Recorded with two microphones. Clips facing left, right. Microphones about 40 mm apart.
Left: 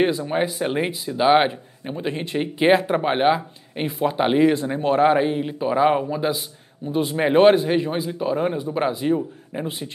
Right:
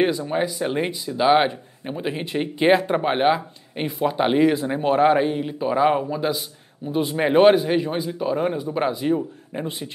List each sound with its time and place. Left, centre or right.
0.2 s speech: left
0.7 s speech: centre
1.9 s speech: centre